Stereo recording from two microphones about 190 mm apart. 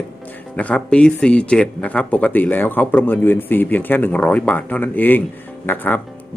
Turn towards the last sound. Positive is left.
turn(degrees=10)  # may be behind; listen again after turning